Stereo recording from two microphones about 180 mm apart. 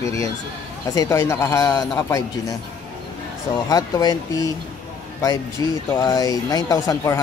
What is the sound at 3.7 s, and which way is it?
Speech, 20° left (ahead or behind).